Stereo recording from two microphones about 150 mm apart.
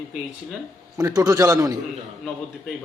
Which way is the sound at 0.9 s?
25° right (ahead or behind).